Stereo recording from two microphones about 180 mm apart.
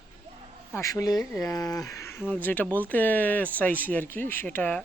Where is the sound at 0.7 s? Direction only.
15° left (ahead or behind).